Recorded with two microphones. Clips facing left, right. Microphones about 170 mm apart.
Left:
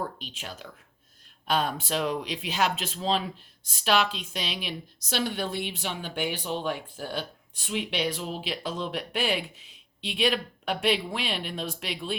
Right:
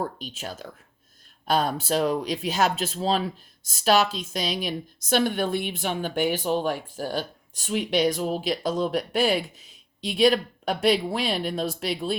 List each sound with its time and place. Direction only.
0.2 s speech: 40° right (ahead or behind)